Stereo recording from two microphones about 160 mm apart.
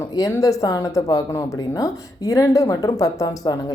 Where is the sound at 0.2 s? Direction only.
20° left (ahead or behind).